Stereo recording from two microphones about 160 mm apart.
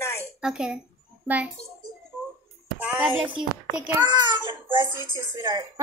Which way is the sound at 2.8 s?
10° right (ahead or behind).